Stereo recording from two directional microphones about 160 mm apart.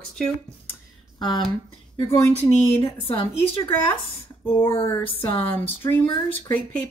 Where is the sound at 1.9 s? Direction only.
40° left (ahead or behind).